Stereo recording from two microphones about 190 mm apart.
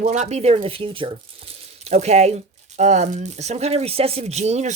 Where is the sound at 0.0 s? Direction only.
35° right (ahead or behind).